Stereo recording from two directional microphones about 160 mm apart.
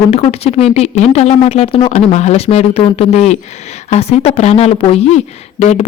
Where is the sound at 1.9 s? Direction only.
45° left (ahead or behind).